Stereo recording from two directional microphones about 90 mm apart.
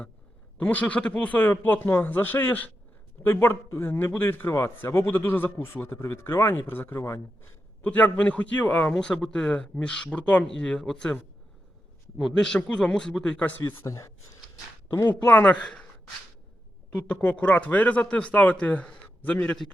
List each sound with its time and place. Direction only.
0.6 s speech: 15° left (ahead or behind)
7.8 s a man's voice: 15° left (ahead or behind)
13.6 s speech: 25° left (ahead or behind)
14.9 s a man's voice: 20° left (ahead or behind)
16.9 s a man's voice: 15° left (ahead or behind)